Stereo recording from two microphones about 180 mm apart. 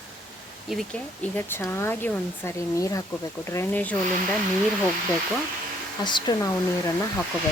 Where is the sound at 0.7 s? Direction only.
5° left (ahead or behind).